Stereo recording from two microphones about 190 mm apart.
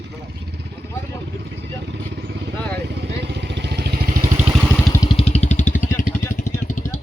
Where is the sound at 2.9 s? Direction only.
60° right (ahead or behind).